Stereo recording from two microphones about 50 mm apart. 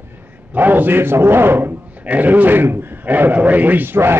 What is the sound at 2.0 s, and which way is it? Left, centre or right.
A man's voice, right.